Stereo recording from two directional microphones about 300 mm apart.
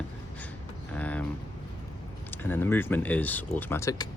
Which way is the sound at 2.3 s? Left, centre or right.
Centre.